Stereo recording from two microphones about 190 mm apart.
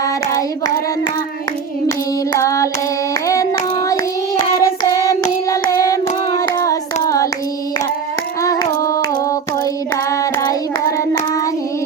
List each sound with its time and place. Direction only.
0.0 s hands: 15° left (ahead or behind)
2.4 s hands: 15° left (ahead or behind)
3.2 s child singing: 15° left (ahead or behind)
6.6 s hands: 15° left (ahead or behind)
8.4 s child singing: 20° left (ahead or behind)
9.9 s hands: 15° left (ahead or behind)